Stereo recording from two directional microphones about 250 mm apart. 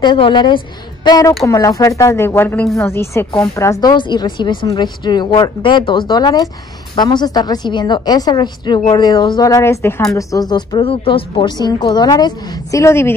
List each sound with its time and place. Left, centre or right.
0.0 s a woman's voice: centre